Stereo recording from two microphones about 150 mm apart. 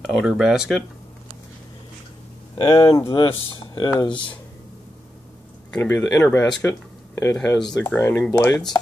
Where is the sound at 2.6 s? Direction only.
35° left (ahead or behind).